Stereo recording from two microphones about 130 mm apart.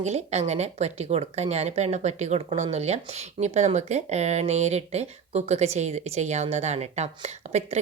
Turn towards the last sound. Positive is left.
turn(degrees=-60)  # may be behind; listen again after turning